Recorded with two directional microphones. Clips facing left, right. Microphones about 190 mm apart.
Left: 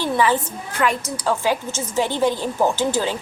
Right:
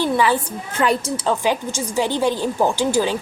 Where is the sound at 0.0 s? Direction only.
15° right (ahead or behind).